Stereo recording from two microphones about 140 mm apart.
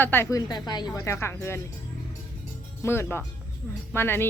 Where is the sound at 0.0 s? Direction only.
15° left (ahead or behind).